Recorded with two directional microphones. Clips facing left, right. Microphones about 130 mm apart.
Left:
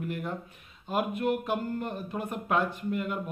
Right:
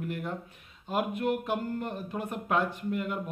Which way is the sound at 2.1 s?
20° left (ahead or behind).